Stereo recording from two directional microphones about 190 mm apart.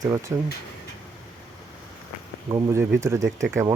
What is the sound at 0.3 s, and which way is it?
Speech, 15° right (ahead or behind).